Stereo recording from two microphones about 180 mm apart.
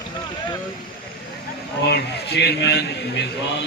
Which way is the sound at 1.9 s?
65° left (ahead or behind).